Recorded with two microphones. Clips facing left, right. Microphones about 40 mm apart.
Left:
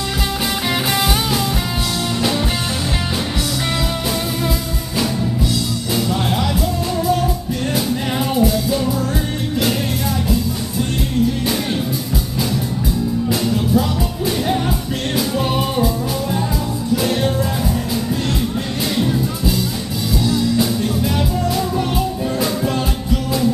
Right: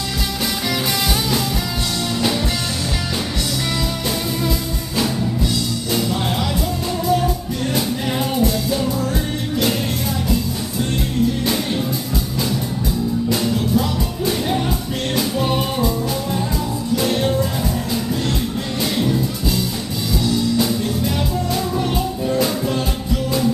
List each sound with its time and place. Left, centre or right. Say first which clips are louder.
5.9 s music: left 2 dB; centre
7.7 s music: left 1 dB; centre
13.3 s music: left 2 dB; centre
16.9 s music: even; centre
18.9 s music: left 2 dB; centre